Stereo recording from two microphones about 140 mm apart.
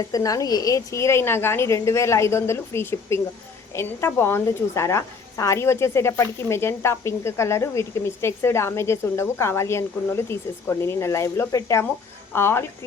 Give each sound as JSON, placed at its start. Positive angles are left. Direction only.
{"t": 0.1, "sound": "a woman's voice", "side_deg": 25}